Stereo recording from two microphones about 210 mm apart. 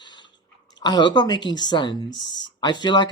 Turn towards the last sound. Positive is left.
turn(degrees=20)  # may be behind; listen again after turning